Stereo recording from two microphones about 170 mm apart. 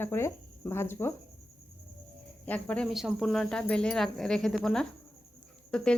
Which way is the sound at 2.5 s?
5° left (ahead or behind).